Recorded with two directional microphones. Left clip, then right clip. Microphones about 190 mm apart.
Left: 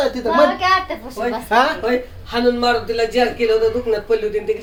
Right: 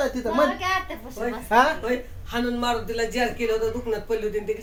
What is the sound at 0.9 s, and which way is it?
Speech, 25° left (ahead or behind).